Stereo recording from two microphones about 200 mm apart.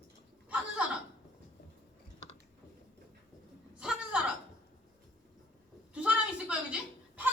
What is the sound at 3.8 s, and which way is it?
Chuckle, 5° right (ahead or behind).